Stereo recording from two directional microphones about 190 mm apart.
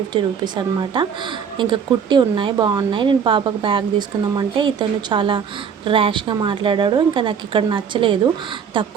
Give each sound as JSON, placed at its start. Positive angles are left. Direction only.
{"t": 0.1, "sound": "speech", "side_deg": -25}